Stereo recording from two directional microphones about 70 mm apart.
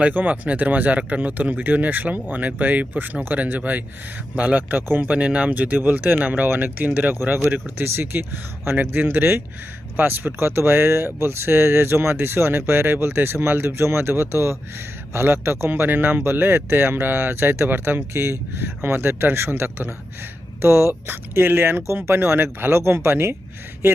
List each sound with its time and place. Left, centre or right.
0.0 s speech: right